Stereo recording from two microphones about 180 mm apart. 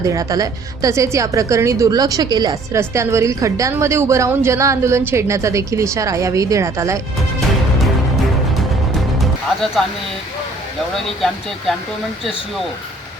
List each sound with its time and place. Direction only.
0.0 s a woman's voice: 20° right (ahead or behind)
9.1 s music: centre (ahead or behind)